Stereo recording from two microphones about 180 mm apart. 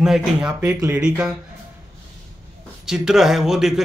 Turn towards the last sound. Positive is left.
turn(degrees=-5)  # may be behind; listen again after turning